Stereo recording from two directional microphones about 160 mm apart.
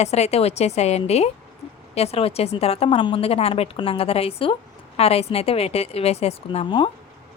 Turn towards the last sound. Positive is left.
turn(degrees=40)  # may be behind; listen again after turning